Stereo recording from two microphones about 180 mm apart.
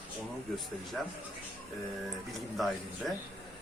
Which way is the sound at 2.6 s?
Centre (ahead or behind).